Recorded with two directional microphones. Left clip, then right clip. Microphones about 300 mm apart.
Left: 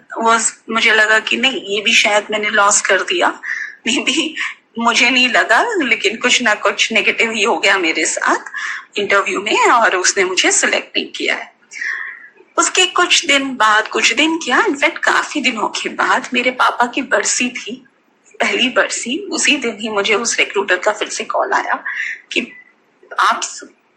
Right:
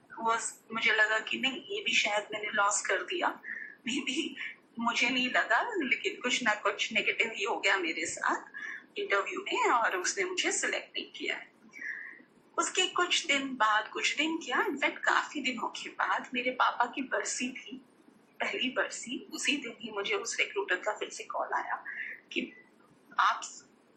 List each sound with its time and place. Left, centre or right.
0.2 s speech: left